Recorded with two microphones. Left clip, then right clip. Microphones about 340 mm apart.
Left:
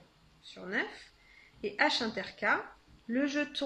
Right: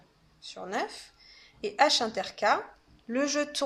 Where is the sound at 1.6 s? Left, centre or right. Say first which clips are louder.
Right 5 dB; centre.